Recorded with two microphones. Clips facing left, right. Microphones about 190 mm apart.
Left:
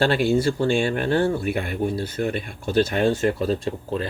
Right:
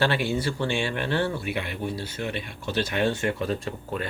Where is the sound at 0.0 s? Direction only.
45° left (ahead or behind).